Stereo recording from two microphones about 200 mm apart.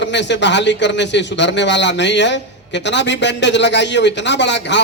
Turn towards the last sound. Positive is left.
turn(degrees=60)  # may be behind; listen again after turning